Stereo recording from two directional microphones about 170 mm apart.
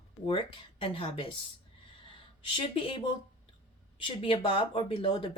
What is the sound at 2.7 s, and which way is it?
Speech, 30° left (ahead or behind).